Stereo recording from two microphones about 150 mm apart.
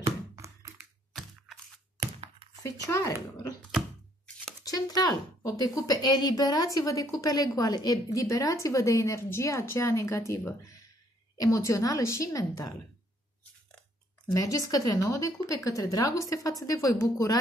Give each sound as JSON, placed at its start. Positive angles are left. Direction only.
{"t": 0.4, "sound": "a sound", "side_deg": -20}
{"t": 2.9, "sound": "speech", "side_deg": 20}
{"t": 4.6, "sound": "speech", "side_deg": 25}
{"t": 14.2, "sound": "speech", "side_deg": 20}